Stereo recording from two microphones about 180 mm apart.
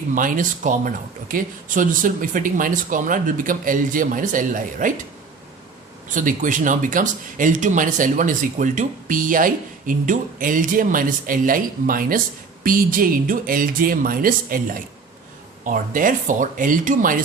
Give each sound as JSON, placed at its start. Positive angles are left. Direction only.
{"t": 0.1, "sound": "speech", "side_deg": -50}
{"t": 6.1, "sound": "speech", "side_deg": -45}